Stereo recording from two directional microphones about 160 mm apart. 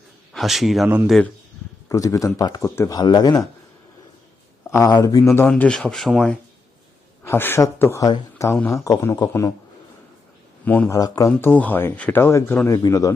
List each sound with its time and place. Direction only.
0.3 s a man's voice: centre (ahead or behind)
1.9 s speech: 20° left (ahead or behind)
4.7 s speech: 20° left (ahead or behind); by 6.3 s centre (ahead or behind)
7.3 s speech: 15° left (ahead or behind)
8.5 s a man's voice: 5° left (ahead or behind)
8.8 s speech: 20° left (ahead or behind)
10.7 s speech: 10° left (ahead or behind)
10.9 s speech: 20° left (ahead or behind)